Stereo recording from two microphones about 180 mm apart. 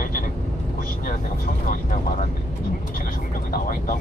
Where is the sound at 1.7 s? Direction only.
50° left (ahead or behind).